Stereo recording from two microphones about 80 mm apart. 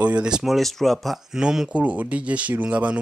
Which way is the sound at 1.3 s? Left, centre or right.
Centre.